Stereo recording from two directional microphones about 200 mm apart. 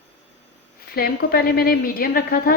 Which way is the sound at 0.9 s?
50° left (ahead or behind).